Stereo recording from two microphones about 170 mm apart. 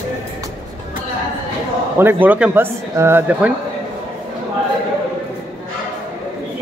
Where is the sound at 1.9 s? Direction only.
10° right (ahead or behind).